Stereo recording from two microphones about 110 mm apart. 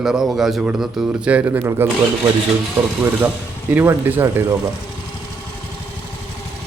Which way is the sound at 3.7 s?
20° right (ahead or behind).